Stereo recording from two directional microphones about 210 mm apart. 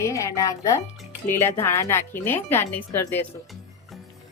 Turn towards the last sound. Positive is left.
turn(degrees=10)  # may be behind; listen again after turning